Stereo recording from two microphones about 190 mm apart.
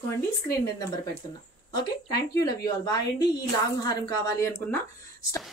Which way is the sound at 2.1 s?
20° left (ahead or behind).